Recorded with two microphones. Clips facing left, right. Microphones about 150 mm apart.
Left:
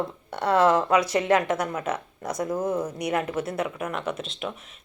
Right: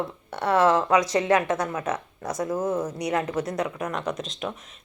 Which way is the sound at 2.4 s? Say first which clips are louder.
Even; 10° right (ahead or behind).